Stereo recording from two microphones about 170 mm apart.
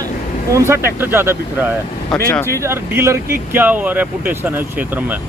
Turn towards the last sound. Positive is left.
turn(degrees=-10)  # may be behind; listen again after turning